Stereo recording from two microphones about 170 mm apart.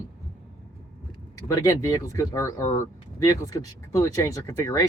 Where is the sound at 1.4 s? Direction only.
20° left (ahead or behind).